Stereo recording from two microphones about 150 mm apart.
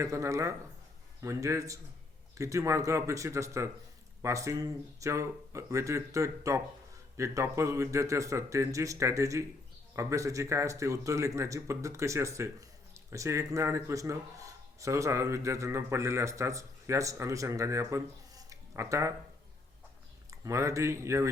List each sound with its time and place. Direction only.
0.0 s speech: 20° right (ahead or behind)
20.3 s speech: 20° right (ahead or behind)